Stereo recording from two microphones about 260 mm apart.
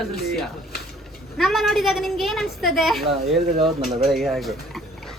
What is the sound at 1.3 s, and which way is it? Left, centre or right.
A child's voice, centre.